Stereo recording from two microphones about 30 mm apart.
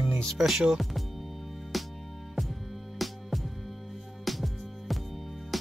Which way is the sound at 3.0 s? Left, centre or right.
Centre.